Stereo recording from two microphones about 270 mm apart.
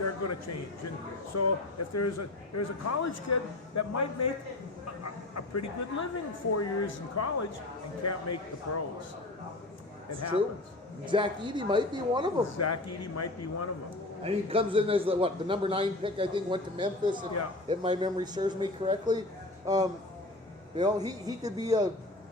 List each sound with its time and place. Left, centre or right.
0.0 s a sound: left
1.4 s a man's voice: left
3.8 s speech: left
5.3 s speech: left
6.6 s a man's voice: left
11.0 s speech: centre
12.5 s a man's voice: left
14.3 s a man's voice: centre